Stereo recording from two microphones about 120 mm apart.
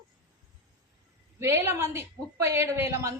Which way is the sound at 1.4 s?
25° right (ahead or behind).